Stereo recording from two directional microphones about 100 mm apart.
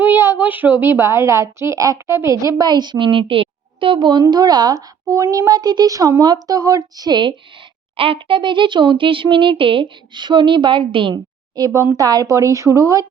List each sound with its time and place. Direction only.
0.0 s a woman's voice: 20° right (ahead or behind); by 4.2 s 55° right (ahead or behind)
4.2 s speech: 45° right (ahead or behind)
7.9 s speech: 65° right (ahead or behind)
11.1 s a woman's voice: 40° right (ahead or behind)